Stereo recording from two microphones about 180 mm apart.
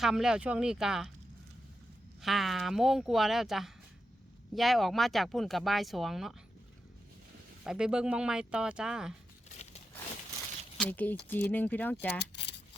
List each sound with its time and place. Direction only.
0.0 s speech: 5° right (ahead or behind)
2.2 s speech: centre (ahead or behind)
7.6 s speech: 5° right (ahead or behind)
10.8 s speech: 10° left (ahead or behind)
12.2 s speech: 70° left (ahead or behind)